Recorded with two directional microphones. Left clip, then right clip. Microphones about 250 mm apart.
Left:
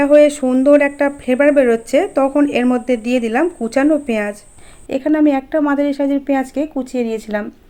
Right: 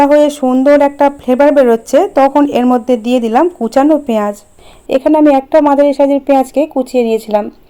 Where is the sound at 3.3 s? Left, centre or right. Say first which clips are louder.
Right 6 dB; centre.